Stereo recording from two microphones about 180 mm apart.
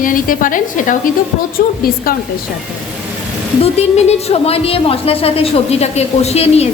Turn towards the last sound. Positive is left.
turn(degrees=35)  # may be behind; listen again after turning